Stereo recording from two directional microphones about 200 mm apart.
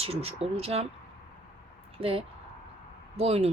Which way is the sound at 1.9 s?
25° right (ahead or behind).